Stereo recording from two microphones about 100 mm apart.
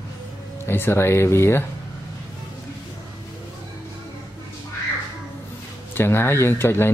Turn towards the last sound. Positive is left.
turn(degrees=25)  # may be behind; listen again after turning